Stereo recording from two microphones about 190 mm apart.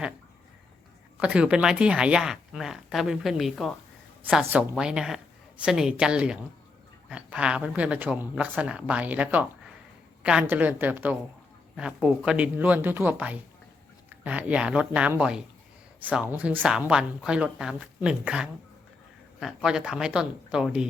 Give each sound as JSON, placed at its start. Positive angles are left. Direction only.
{"t": 1.2, "sound": "speech", "side_deg": -5}